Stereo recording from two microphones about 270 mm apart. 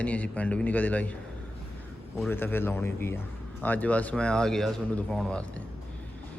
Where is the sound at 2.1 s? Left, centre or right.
Centre.